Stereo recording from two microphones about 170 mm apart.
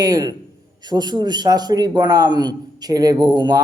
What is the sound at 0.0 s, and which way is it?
A man's voice, 20° right (ahead or behind).